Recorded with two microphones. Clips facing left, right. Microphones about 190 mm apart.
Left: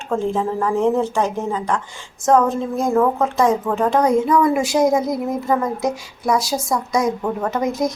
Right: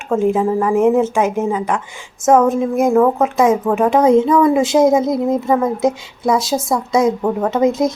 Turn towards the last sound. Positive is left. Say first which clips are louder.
# right 5 dB
turn(degrees=-25)  # may be behind; listen again after turning